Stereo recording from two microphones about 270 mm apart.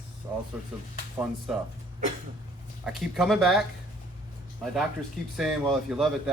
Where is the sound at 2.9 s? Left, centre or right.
Centre.